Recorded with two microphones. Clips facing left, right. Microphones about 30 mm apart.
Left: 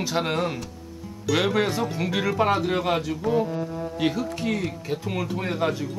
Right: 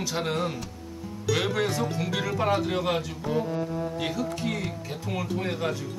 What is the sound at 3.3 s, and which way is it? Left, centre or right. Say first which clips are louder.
Music: left 3 dB; centre.